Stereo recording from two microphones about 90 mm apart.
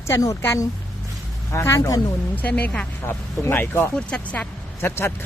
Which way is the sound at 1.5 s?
30° left (ahead or behind).